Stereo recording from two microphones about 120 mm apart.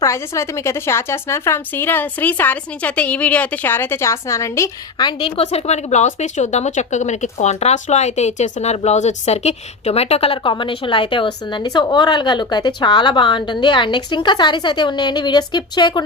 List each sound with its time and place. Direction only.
0.0 s a woman's voice: 25° left (ahead or behind)
4.9 s a woman's voice: 40° left (ahead or behind)
5.4 s speech: 60° left (ahead or behind); by 16.0 s 35° left (ahead or behind)